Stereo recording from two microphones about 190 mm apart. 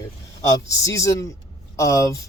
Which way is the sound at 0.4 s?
15° left (ahead or behind).